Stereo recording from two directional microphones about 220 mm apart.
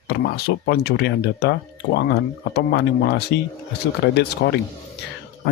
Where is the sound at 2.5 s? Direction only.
50° left (ahead or behind).